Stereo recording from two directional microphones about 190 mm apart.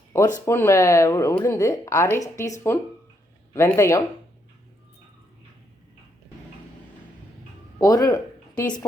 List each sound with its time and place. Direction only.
0.4 s speech: 15° left (ahead or behind)
7.8 s speech: 20° left (ahead or behind)